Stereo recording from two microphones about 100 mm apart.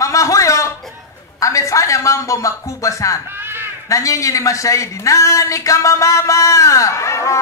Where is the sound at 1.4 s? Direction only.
30° left (ahead or behind).